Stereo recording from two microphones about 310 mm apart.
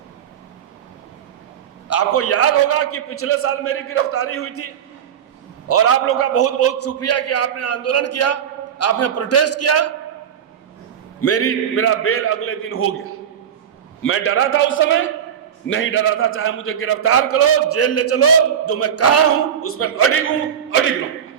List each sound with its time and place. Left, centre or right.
1.9 s a man's voice: left
11.2 s a man's voice: left